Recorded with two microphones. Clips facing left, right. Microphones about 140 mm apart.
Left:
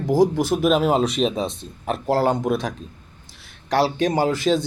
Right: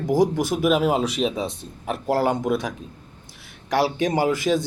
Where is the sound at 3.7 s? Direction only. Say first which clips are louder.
Left 2 dB; 15° right (ahead or behind).